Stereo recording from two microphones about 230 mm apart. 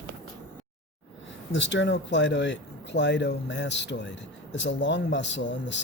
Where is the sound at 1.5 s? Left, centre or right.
Left.